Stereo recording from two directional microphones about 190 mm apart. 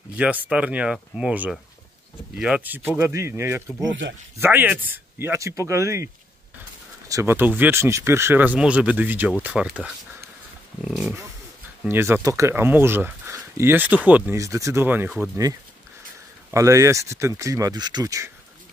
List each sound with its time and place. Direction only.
0.1 s speech: 5° right (ahead or behind)
7.1 s speech: 15° right (ahead or behind)
16.4 s speech: 15° right (ahead or behind)